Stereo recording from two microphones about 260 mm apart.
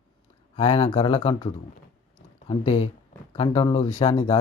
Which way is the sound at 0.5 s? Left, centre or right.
Left.